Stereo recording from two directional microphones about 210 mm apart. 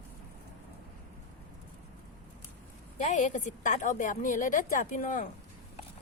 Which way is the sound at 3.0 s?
35° left (ahead or behind).